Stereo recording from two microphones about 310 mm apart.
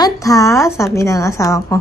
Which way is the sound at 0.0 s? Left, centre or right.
Centre.